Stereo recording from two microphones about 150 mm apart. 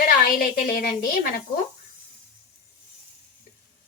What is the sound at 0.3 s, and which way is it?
A woman's voice, 85° left.